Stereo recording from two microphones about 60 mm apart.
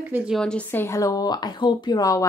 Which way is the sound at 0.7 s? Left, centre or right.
Left.